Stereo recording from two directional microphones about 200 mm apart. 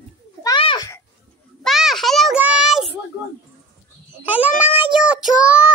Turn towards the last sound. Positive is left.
turn(degrees=-5)  # may be behind; listen again after turning